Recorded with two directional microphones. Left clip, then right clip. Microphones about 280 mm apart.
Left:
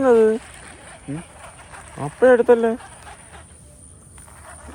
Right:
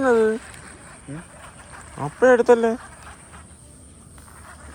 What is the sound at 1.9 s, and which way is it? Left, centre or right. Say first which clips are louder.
Speech: left 2 dB; centre.